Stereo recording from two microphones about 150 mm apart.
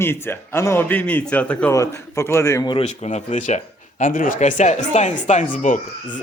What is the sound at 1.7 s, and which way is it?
Speech, 20° left (ahead or behind).